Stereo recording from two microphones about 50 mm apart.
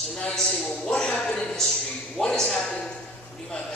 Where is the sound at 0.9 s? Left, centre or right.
Centre.